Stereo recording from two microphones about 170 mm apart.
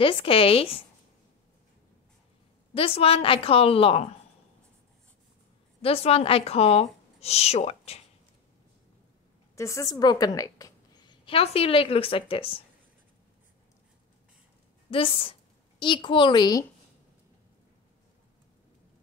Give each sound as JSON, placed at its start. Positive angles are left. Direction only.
{"t": 0.0, "sound": "speech", "side_deg": 35}
{"t": 2.7, "sound": "speech", "side_deg": 35}
{"t": 5.8, "sound": "speech", "side_deg": 35}
{"t": 9.6, "sound": "a woman's voice", "side_deg": 15}
{"t": 11.2, "sound": "speech", "side_deg": 35}
{"t": 14.9, "sound": "a woman's voice", "side_deg": 30}